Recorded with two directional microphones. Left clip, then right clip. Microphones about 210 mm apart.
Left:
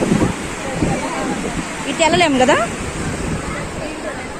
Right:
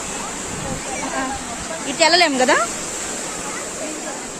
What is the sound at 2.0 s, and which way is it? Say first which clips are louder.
Speech: left 1 dB; centre (ahead or behind).